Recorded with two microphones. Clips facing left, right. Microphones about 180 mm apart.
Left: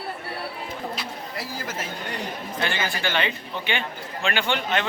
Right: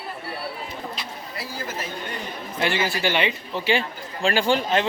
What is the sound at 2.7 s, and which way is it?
Speech, 30° right (ahead or behind).